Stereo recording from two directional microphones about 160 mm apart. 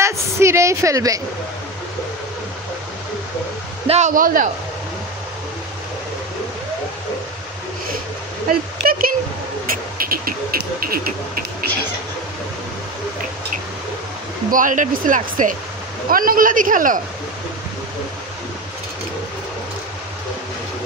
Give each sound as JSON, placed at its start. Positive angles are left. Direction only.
{"t": 0.0, "sound": "a woman's voice", "side_deg": -15}
{"t": 3.8, "sound": "a man's voice", "side_deg": -40}
{"t": 4.1, "sound": "music", "side_deg": -60}
{"t": 8.5, "sound": "music", "side_deg": -65}
{"t": 14.5, "sound": "music", "side_deg": -55}